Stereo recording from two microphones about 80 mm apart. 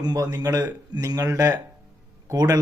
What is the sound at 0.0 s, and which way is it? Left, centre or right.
A man's voice, right.